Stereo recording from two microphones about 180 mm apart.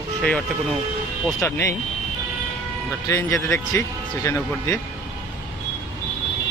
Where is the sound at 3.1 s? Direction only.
15° left (ahead or behind).